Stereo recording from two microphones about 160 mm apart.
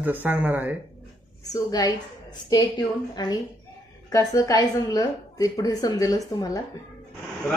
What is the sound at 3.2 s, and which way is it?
A woman's voice, 25° left (ahead or behind).